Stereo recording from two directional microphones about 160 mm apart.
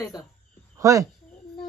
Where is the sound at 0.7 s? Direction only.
20° right (ahead or behind).